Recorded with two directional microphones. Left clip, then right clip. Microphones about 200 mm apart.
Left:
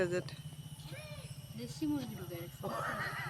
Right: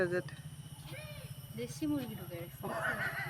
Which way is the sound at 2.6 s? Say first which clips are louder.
Right 2 dB; 50° right (ahead or behind).